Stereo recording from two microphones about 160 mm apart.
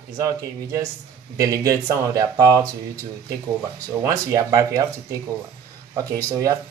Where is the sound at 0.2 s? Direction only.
20° right (ahead or behind).